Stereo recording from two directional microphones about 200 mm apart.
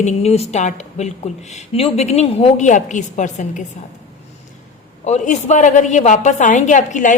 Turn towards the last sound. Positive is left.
turn(degrees=40)  # may be behind; listen again after turning